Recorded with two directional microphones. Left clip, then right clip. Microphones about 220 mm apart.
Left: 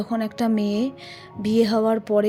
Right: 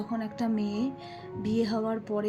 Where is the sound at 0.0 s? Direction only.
45° left (ahead or behind).